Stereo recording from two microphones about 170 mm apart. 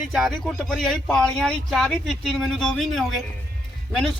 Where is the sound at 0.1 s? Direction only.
Centre (ahead or behind).